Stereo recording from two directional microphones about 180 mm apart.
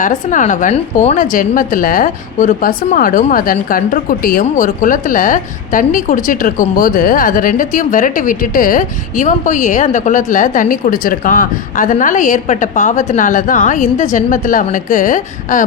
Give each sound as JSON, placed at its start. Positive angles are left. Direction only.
{"t": 0.0, "sound": "a woman's voice", "side_deg": 45}